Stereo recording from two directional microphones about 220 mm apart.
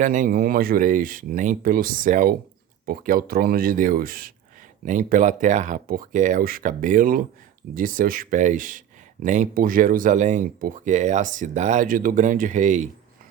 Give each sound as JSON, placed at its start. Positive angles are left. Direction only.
{"t": 0.0, "sound": "speech", "side_deg": -35}